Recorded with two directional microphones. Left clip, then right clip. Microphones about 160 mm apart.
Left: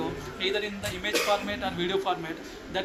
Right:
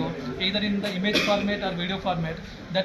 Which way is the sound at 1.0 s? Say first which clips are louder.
Right 2 dB; 35° left (ahead or behind).